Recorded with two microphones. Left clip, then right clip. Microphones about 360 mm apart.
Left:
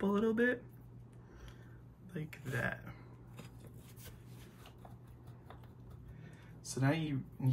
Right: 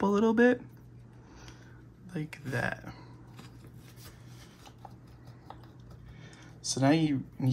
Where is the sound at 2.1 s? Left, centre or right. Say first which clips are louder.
Right 6 dB; centre.